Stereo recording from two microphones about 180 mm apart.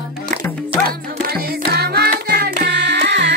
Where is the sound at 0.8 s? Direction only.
55° right (ahead or behind).